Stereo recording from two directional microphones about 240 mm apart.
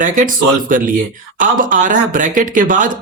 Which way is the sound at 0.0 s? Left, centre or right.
Right.